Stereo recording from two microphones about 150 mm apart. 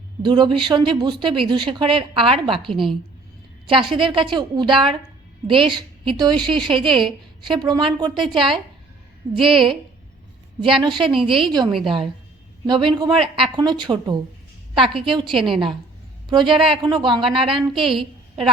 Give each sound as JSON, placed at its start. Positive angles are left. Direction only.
{"t": 0.2, "sound": "a woman's voice", "side_deg": -30}
{"t": 3.7, "sound": "a woman's voice", "side_deg": -35}